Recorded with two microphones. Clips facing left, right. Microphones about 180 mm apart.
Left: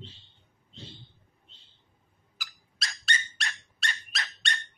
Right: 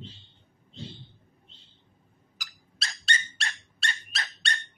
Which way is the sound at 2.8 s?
30° right (ahead or behind).